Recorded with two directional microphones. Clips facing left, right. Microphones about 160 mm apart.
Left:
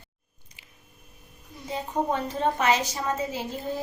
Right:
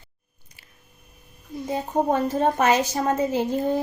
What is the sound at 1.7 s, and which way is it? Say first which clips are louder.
A woman's voice: right 5 dB; 45° right (ahead or behind).